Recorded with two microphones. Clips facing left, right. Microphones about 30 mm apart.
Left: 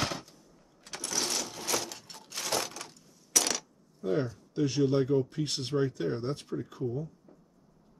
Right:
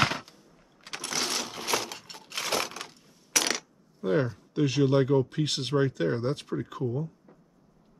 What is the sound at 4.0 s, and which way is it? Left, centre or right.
Speech, right.